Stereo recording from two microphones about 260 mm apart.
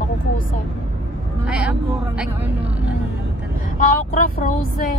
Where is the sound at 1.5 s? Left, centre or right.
Centre.